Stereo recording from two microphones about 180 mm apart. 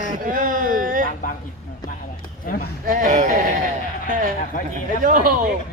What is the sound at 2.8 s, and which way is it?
Speech, 45° right (ahead or behind).